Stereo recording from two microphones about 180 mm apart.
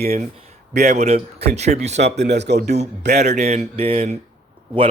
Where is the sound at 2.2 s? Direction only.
70° right (ahead or behind).